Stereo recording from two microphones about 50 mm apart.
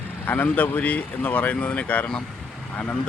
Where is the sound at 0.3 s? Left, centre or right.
Left.